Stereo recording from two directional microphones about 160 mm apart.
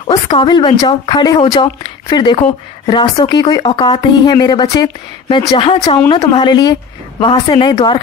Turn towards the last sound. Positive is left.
turn(degrees=30)  # may be behind; listen again after turning